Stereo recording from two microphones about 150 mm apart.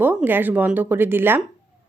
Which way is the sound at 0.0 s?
10° right (ahead or behind).